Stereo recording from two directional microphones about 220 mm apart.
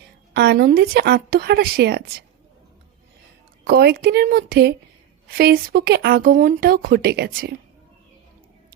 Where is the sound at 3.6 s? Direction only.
45° right (ahead or behind).